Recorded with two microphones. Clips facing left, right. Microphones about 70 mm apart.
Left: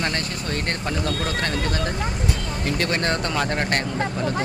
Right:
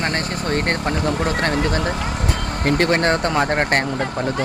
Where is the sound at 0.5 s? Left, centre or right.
Right.